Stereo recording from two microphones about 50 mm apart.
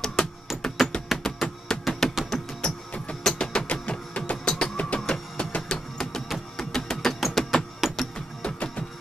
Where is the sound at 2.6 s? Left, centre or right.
Left.